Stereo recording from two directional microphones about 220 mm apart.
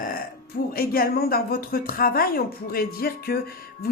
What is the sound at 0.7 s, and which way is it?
Speech, 40° left (ahead or behind).